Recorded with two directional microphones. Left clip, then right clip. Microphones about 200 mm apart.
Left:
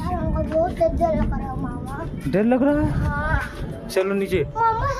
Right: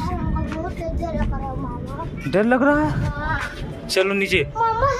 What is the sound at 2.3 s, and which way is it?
Speech, 5° left (ahead or behind).